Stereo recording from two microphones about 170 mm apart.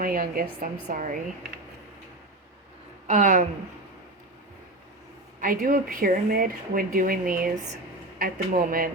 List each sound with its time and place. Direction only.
0.0 s speech: 55° right (ahead or behind)
3.1 s speech: 45° right (ahead or behind)
5.4 s speech: 55° right (ahead or behind)